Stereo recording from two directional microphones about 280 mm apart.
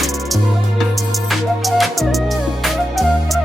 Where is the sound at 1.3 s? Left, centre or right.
Centre.